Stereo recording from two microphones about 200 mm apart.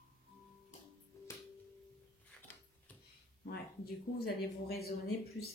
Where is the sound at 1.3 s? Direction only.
15° left (ahead or behind).